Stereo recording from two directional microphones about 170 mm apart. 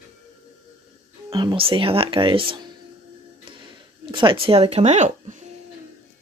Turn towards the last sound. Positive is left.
turn(degrees=-45)  # may be behind; listen again after turning